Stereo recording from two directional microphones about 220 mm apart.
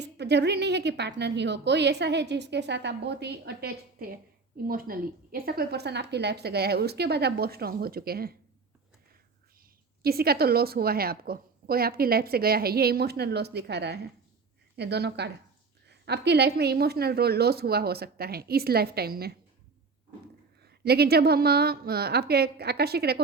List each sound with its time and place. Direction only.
0.0 s a woman's voice: 50° right (ahead or behind)
10.0 s a woman's voice: 45° right (ahead or behind)
20.6 s a woman's voice: 45° right (ahead or behind)